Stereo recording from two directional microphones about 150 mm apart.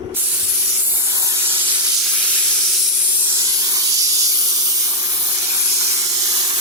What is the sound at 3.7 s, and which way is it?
Snake, 25° right (ahead or behind).